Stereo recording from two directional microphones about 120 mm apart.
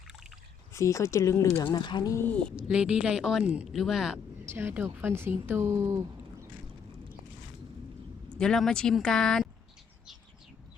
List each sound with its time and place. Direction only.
0.1 s a sound: 5° right (ahead or behind)
0.7 s speech: 25° left (ahead or behind)
1.6 s speech: 40° left (ahead or behind)
2.1 s speech: 15° left (ahead or behind)
2.6 s a woman's voice: 5° right (ahead or behind)
4.4 s speech: 20° right (ahead or behind)
8.4 s speech: 5° left (ahead or behind)